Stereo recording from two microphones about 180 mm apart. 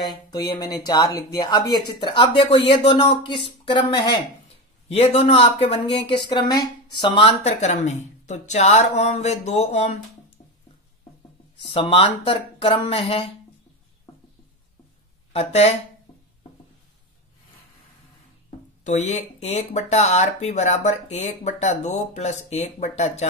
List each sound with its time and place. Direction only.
0.0 s speech: 20° left (ahead or behind); by 9.9 s 35° left (ahead or behind)
11.6 s speech: 30° left (ahead or behind)
15.3 s speech: 35° left (ahead or behind)
18.9 s speech: 40° left (ahead or behind)